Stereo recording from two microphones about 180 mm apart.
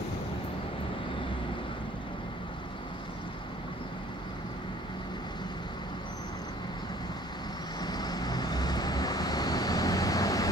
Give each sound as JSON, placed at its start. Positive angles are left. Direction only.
{"t": 7.8, "sound": "vehicle", "side_deg": 20}